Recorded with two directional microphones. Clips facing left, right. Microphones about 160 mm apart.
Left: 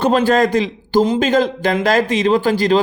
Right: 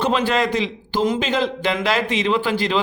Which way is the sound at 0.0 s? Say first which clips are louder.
Left 6 dB; 45° left (ahead or behind).